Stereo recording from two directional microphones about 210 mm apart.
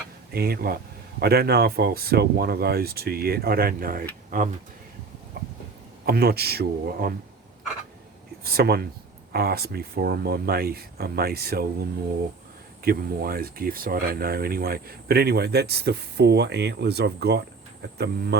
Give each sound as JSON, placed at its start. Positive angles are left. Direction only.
{"t": 0.3, "sound": "speech", "side_deg": -45}
{"t": 6.1, "sound": "speech", "side_deg": -45}
{"t": 8.4, "sound": "speech", "side_deg": -50}